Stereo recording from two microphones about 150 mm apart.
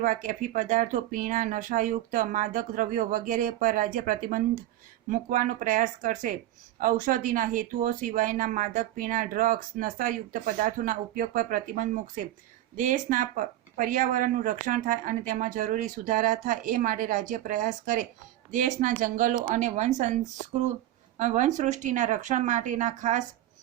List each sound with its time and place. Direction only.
0.0 s a woman's voice: 65° right (ahead or behind)